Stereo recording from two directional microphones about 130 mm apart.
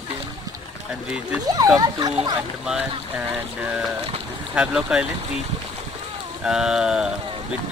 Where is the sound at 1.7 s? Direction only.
30° right (ahead or behind).